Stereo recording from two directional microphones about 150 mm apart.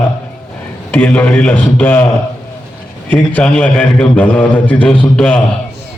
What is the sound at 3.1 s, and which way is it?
A man's voice, 10° left (ahead or behind).